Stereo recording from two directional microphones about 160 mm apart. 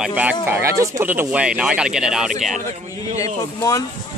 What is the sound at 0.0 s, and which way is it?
Speech, 10° right (ahead or behind).